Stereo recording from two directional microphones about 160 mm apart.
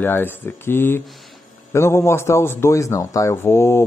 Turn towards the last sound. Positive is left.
turn(degrees=15)  # may be behind; listen again after turning